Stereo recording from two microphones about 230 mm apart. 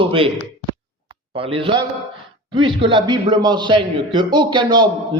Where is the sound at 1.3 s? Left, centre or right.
Right.